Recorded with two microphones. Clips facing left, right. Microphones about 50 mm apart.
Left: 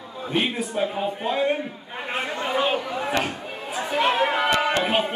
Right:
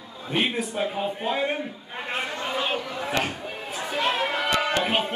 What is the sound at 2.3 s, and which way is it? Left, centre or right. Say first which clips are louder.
Speech: left 7 dB; centre.